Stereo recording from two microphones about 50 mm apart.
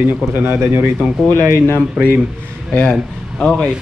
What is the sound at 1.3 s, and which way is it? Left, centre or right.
Speech, right.